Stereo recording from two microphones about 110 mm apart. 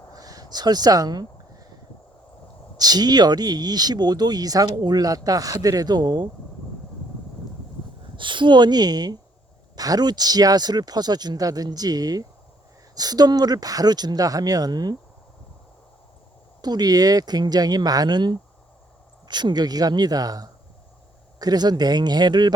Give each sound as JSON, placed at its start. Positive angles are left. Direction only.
{"t": 0.1, "sound": "a sound", "side_deg": -35}
{"t": 2.7, "sound": "speech", "side_deg": -35}
{"t": 8.1, "sound": "speech", "side_deg": -45}
{"t": 16.6, "sound": "speech", "side_deg": -40}